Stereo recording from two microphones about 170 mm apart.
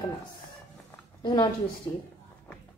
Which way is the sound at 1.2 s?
25° left (ahead or behind).